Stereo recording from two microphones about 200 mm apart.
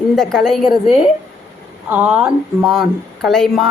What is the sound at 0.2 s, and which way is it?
Speech, centre (ahead or behind).